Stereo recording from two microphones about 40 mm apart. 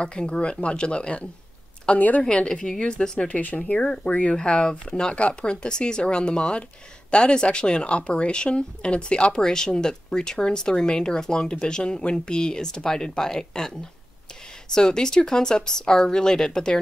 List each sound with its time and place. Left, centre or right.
0.0 s speech: left
2.0 s a woman's voice: left
2.2 s speech: left
3.3 s speech: left
3.8 s speech: left
4.4 s speech: centre